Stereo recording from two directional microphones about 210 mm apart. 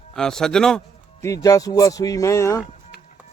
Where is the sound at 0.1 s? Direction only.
Centre (ahead or behind).